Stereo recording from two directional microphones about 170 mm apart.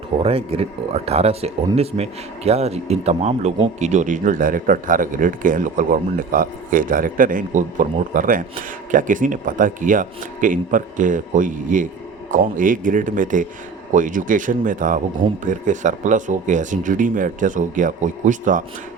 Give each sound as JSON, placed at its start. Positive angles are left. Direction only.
{"t": 0.2, "sound": "speech", "side_deg": -35}